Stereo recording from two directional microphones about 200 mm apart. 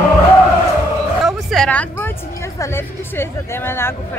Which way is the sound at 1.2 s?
Centre (ahead or behind).